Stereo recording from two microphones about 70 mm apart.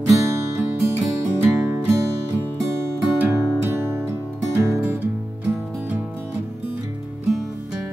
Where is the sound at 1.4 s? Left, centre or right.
Right.